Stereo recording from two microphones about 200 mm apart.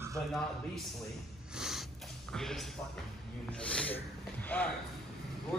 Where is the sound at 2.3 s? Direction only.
Centre (ahead or behind).